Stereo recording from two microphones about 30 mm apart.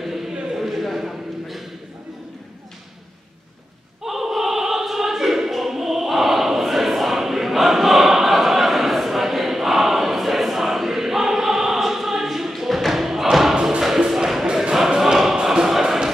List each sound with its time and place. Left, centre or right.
0.0 s a sound: centre
4.0 s opera: centre
13.7 s music: centre
14.4 s choir: right